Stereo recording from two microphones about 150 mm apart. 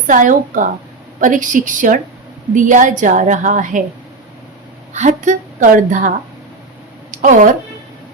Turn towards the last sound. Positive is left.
turn(degrees=-60)  # may be behind; listen again after turning